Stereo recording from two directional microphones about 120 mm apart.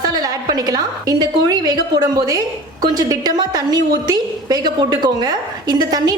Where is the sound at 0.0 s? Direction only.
35° right (ahead or behind).